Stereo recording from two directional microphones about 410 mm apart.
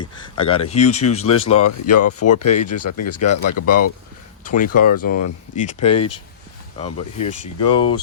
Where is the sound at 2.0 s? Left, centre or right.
Left.